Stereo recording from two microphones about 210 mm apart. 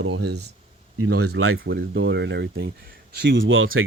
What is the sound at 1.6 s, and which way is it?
Speech, 50° right (ahead or behind).